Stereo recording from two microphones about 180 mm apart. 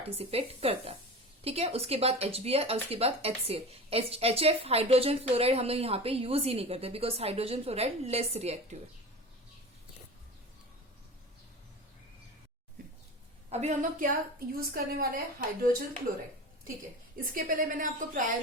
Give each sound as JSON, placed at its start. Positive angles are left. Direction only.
{"t": 0.0, "sound": "speech", "side_deg": -35}
{"t": 13.5, "sound": "a woman's voice", "side_deg": -40}
{"t": 17.3, "sound": "a woman's voice", "side_deg": -50}